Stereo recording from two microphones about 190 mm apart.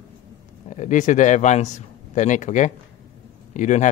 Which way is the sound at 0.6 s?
40° left (ahead or behind).